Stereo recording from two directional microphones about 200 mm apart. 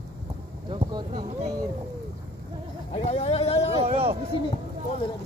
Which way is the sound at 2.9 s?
30° left (ahead or behind).